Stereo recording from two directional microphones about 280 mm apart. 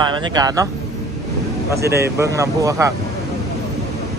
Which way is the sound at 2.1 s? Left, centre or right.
Centre.